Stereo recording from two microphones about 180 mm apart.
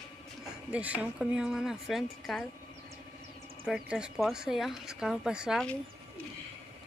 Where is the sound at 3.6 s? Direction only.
5° right (ahead or behind).